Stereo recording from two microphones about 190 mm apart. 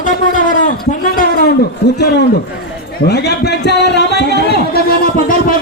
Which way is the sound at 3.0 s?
60° left (ahead or behind).